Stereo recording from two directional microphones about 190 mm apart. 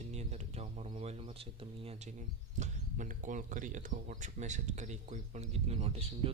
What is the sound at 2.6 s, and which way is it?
Speech, 40° right (ahead or behind).